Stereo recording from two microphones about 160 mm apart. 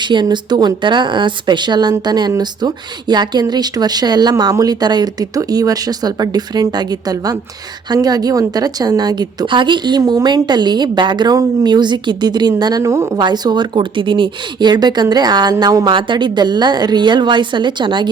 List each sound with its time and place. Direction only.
0.0 s a woman's voice: 30° right (ahead or behind)